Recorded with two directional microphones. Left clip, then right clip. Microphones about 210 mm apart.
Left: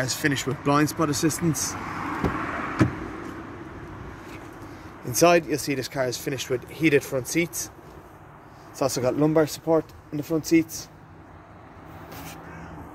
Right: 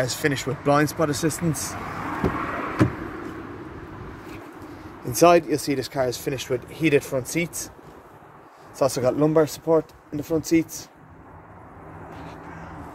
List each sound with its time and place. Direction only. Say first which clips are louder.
0.0 s speech: right 1 dB; centre (ahead or behind)
1.8 s vehicle: right 1 dB; 55° right (ahead or behind)
5.0 s speech: right 3 dB; centre (ahead or behind)
8.7 s speech: right 3 dB; centre (ahead or behind)